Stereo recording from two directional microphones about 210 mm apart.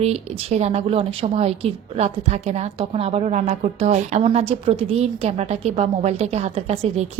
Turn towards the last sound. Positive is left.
turn(degrees=-30)  # may be behind; listen again after turning